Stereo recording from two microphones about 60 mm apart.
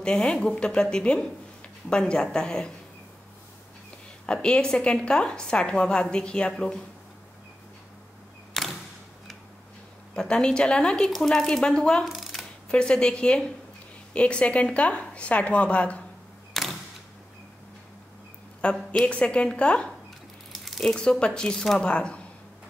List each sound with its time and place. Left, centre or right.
0.0 s a woman's voice: centre
4.3 s a woman's voice: centre
8.6 s a sound: centre
10.1 s a woman's voice: centre
12.0 s mechanisms: centre
12.6 s a woman's voice: centre
16.6 s camera: centre
18.6 s a woman's voice: centre
20.5 s a woman's voice: centre